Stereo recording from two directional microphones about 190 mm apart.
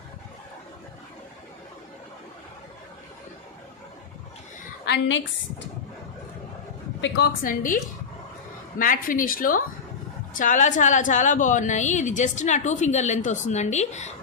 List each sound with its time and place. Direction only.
4.9 s a woman's voice: 80° left
7.4 s a woman's voice: 45° left (ahead or behind)
8.8 s a woman's voice: 45° left (ahead or behind)